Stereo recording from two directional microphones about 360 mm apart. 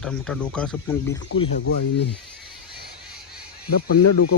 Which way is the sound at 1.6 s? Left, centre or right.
Left.